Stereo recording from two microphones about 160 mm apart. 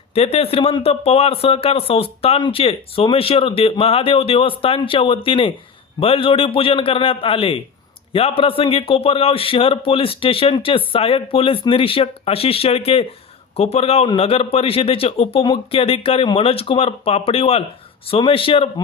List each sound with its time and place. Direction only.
0.1 s speech: 35° left (ahead or behind)